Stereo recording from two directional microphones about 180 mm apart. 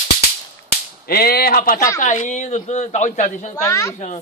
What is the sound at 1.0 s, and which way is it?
Speech, 60° left (ahead or behind).